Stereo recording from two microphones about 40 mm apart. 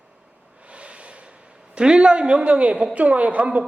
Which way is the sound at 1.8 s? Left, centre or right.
Right.